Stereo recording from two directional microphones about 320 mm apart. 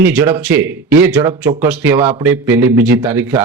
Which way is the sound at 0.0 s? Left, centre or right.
Centre.